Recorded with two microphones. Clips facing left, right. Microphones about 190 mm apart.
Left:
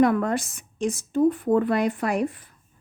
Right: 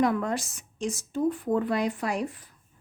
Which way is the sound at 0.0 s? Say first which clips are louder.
Left 5 dB; 60° left (ahead or behind).